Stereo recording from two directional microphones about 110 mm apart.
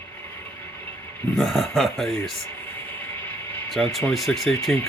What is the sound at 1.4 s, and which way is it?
Speech, centre (ahead or behind).